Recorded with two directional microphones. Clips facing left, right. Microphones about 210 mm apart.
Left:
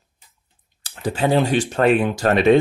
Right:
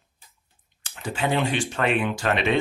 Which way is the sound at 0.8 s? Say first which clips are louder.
Left 6 dB; 35° left (ahead or behind).